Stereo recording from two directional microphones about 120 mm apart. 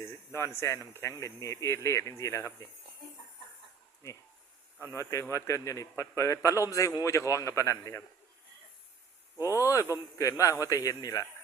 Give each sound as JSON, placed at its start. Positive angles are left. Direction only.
{"t": 0.0, "sound": "a man's voice", "side_deg": 20}
{"t": 4.8, "sound": "a man's voice", "side_deg": 25}
{"t": 9.6, "sound": "a man's voice", "side_deg": 30}